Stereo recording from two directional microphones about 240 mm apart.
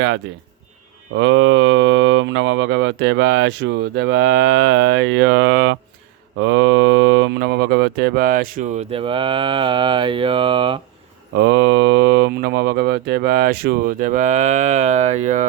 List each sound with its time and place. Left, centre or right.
1.1 s speech: right
11.3 s speech: right